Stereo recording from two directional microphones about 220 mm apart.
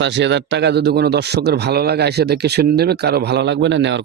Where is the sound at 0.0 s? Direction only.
50° right (ahead or behind).